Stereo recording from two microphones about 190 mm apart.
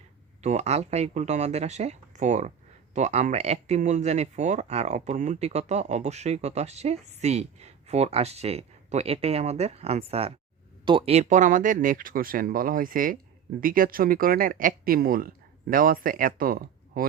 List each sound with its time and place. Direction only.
0.4 s speech: 35° right (ahead or behind)